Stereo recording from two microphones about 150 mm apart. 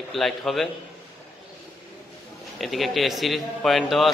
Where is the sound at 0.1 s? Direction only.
Centre (ahead or behind).